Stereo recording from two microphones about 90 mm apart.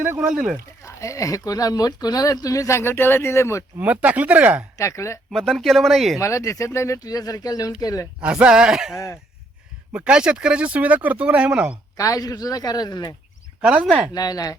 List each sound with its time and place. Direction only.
0.2 s speech: 5° right (ahead or behind)
0.8 s speech: 35° left (ahead or behind)
3.8 s speech: 15° right (ahead or behind)
4.8 s speech: 35° left (ahead or behind)
5.3 s speech: 5° left (ahead or behind)
6.1 s speech: 35° left (ahead or behind)
8.2 s speech: 15° right (ahead or behind)
11.9 s speech: 40° left (ahead or behind)
13.6 s speech: 10° right (ahead or behind)
14.1 s speech: 45° left (ahead or behind)